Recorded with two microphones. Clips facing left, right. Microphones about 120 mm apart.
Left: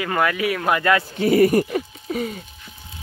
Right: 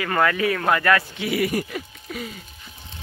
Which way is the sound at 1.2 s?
40° left (ahead or behind).